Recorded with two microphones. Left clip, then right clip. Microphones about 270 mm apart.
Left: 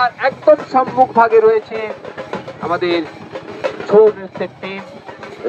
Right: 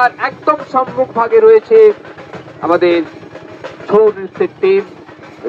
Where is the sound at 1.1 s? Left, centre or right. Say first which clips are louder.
Right 5 dB; right.